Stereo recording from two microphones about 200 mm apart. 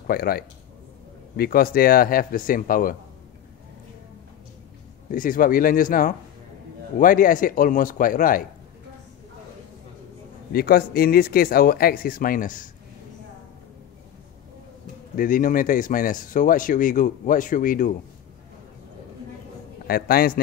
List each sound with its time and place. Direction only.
0.0 s speech: 50° left (ahead or behind)
5.1 s speech: 45° left (ahead or behind)
10.5 s speech: 50° left (ahead or behind)
15.1 s speech: 40° left (ahead or behind)
19.9 s speech: 50° left (ahead or behind)